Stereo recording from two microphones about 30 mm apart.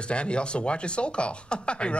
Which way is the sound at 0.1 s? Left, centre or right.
Left.